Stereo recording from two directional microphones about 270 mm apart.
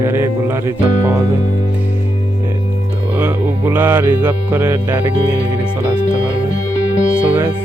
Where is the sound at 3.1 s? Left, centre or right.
Centre.